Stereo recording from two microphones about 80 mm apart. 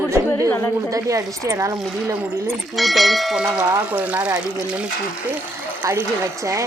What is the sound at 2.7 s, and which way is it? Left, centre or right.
Speech, centre.